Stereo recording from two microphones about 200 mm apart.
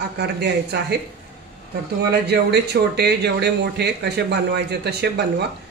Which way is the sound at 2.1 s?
55° right (ahead or behind).